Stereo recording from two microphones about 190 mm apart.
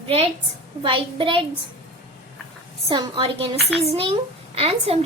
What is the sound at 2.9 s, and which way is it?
A woman's voice, 25° right (ahead or behind).